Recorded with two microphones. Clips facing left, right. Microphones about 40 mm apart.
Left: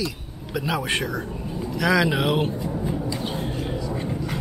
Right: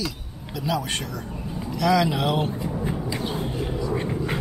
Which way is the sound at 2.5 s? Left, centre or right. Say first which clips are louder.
Left 1 dB; centre.